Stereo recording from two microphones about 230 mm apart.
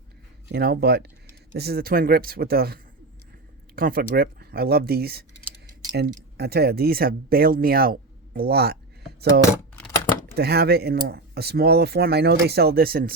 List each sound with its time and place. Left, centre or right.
0.4 s speech: right
10.3 s speech: right